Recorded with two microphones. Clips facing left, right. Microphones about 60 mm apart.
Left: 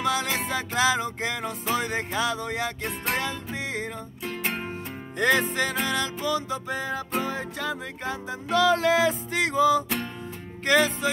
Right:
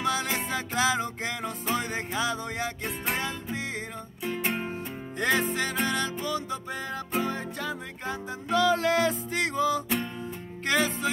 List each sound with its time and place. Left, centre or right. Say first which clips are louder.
0.0 s music: left 2 dB; centre
5.2 s music: left 3 dB; centre